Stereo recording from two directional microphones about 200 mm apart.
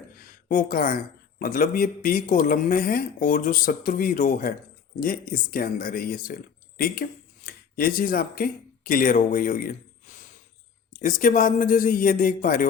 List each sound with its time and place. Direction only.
0.2 s speech: 45° left (ahead or behind)
11.0 s speech: 40° left (ahead or behind)